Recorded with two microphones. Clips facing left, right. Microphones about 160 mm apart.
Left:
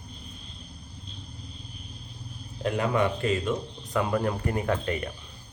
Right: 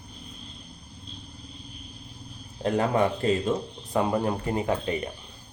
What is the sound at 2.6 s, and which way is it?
A man's voice, 35° right (ahead or behind).